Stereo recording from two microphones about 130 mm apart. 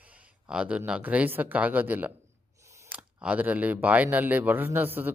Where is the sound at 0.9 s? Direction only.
10° right (ahead or behind).